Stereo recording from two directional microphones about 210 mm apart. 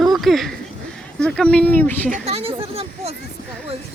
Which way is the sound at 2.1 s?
35° right (ahead or behind).